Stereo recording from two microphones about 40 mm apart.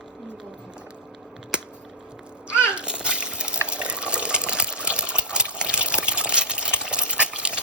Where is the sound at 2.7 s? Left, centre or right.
Right.